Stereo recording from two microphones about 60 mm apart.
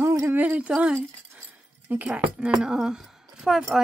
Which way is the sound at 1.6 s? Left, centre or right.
Right.